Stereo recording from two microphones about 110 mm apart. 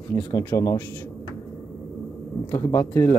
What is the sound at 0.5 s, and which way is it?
Speech, 30° left (ahead or behind).